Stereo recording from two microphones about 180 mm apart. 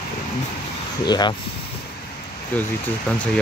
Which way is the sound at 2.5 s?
10° left (ahead or behind).